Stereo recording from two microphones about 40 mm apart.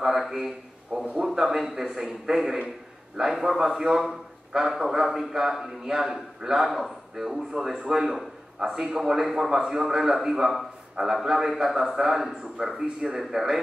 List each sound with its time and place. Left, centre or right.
0.0 s a sound: centre
1.1 s a man's voice: centre
11.8 s a man's voice: centre
12.1 s a man's voice: centre